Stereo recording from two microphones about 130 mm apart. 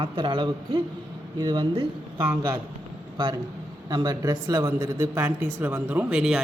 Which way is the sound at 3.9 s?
30° right (ahead or behind).